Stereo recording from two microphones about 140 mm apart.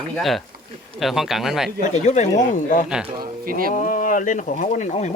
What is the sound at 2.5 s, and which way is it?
Speech, 70° left (ahead or behind).